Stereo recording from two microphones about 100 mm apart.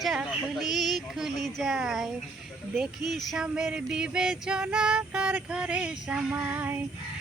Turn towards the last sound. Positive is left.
turn(degrees=-20)  # may be behind; listen again after turning